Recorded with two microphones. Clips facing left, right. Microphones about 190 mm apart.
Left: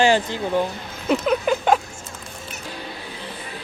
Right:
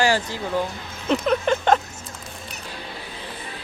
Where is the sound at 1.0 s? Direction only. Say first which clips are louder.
Left 1 dB; 5° left (ahead or behind).